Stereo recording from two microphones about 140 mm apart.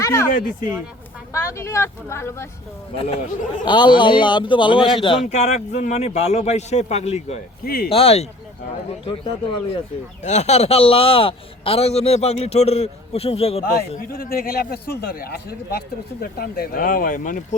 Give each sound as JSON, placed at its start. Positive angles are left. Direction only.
{"t": 0.0, "sound": "speech", "side_deg": 20}
{"t": 1.3, "sound": "speech", "side_deg": 20}
{"t": 2.9, "sound": "a man's voice", "side_deg": 40}
{"t": 5.2, "sound": "a man's voice", "side_deg": 55}
{"t": 7.6, "sound": "speech", "side_deg": 90}
{"t": 7.9, "sound": "a man's voice", "side_deg": 45}
{"t": 13.7, "sound": "speech", "side_deg": 90}